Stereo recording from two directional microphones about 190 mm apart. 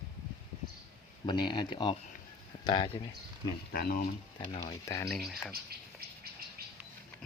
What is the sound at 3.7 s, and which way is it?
Speech, 50° left (ahead or behind).